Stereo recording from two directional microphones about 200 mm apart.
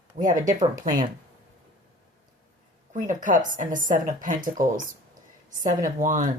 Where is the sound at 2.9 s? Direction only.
40° right (ahead or behind).